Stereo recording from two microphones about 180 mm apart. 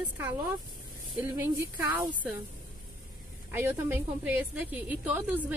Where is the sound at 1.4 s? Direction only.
15° right (ahead or behind).